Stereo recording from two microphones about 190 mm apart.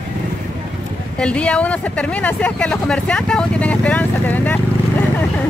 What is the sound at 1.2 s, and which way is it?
Speech, 5° left (ahead or behind).